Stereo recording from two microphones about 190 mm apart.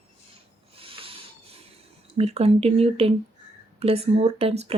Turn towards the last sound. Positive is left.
turn(degrees=-35)  # may be behind; listen again after turning